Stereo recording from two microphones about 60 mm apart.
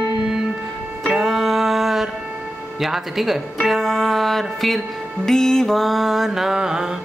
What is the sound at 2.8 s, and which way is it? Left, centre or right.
Mantra, centre.